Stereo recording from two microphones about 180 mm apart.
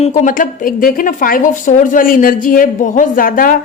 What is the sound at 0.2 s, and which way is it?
A woman's voice, 50° left (ahead or behind).